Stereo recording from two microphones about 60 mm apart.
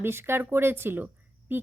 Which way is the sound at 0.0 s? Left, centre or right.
Right.